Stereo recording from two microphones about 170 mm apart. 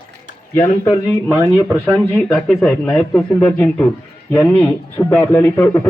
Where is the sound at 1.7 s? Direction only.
Centre (ahead or behind).